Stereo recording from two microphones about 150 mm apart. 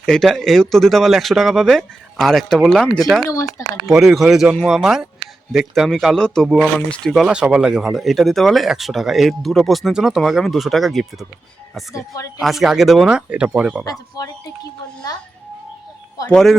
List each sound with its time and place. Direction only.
0.0 s speech: 5° left (ahead or behind)
3.2 s a woman's voice: 20° left (ahead or behind)
3.8 s speech: centre (ahead or behind)
11.9 s a woman's voice: 20° left (ahead or behind)
12.4 s speech: centre (ahead or behind)
16.3 s speech: centre (ahead or behind)